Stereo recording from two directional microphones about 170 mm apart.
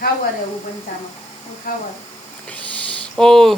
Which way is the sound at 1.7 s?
55° left (ahead or behind).